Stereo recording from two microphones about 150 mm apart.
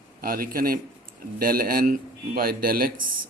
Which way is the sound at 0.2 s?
75° right (ahead or behind).